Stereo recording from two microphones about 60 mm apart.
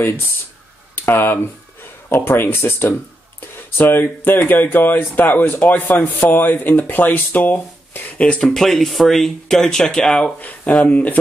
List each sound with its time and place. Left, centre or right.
0.9 s speech: left
8.5 s speech: centre
10.9 s speech: left